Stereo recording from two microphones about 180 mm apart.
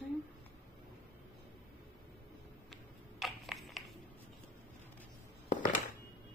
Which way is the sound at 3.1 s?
Centre (ahead or behind).